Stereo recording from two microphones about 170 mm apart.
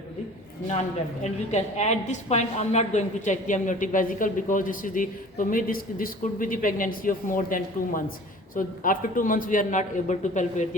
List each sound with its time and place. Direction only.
1.2 s a woman's voice: 40° left (ahead or behind)